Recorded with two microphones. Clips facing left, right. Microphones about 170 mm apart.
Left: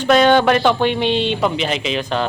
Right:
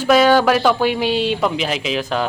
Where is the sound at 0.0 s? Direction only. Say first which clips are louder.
Even; 5° right (ahead or behind).